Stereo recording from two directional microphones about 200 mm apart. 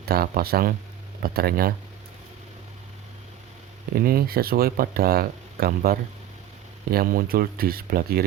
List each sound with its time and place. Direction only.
0.0 s speech: 50° right (ahead or behind)
3.9 s speech: 50° right (ahead or behind)